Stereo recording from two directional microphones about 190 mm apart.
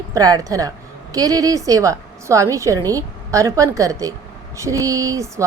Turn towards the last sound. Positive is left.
turn(degrees=-15)  # may be behind; listen again after turning